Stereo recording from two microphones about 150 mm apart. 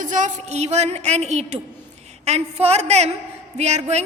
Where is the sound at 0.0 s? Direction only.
60° right (ahead or behind).